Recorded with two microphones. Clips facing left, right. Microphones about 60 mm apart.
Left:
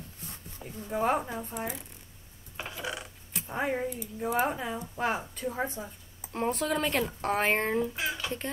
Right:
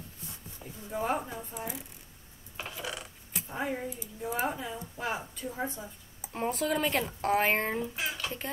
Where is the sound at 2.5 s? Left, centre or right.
Centre.